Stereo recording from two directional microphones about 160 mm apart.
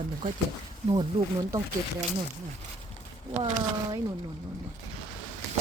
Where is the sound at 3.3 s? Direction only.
50° right (ahead or behind).